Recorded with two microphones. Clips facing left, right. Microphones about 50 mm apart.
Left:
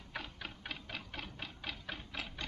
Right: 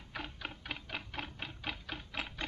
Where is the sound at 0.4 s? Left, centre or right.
Right.